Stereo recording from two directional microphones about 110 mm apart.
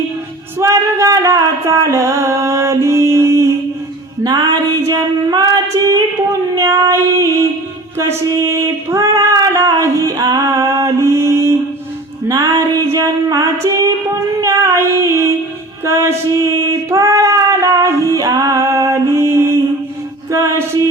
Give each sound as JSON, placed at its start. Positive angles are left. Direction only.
{"t": 0.6, "sound": "a sound", "side_deg": -30}
{"t": 4.2, "sound": "female singing", "side_deg": -35}
{"t": 6.6, "sound": "child singing", "side_deg": -30}
{"t": 8.3, "sound": "female singing", "side_deg": -30}
{"t": 12.3, "sound": "music", "side_deg": -30}
{"t": 13.8, "sound": "child singing", "side_deg": -30}
{"t": 15.8, "sound": "female singing", "side_deg": -25}
{"t": 18.1, "sound": "music", "side_deg": -30}
{"t": 20.3, "sound": "mantra", "side_deg": -25}